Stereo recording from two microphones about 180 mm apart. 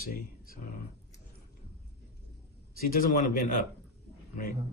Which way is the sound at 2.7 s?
50° left (ahead or behind).